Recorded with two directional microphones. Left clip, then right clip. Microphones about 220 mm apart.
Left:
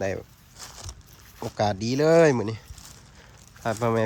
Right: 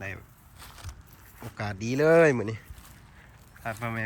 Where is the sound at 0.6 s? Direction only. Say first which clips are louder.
Left 5 dB; 35° left (ahead or behind).